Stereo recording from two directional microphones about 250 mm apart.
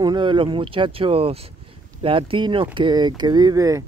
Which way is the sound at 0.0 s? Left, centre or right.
Centre.